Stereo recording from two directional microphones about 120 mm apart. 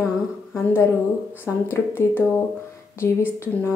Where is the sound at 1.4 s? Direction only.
20° left (ahead or behind).